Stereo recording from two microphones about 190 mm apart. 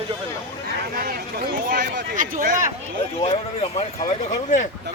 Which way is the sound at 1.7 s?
45° right (ahead or behind).